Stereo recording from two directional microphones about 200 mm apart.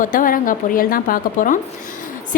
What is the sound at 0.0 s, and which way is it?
A woman's voice, 45° left (ahead or behind).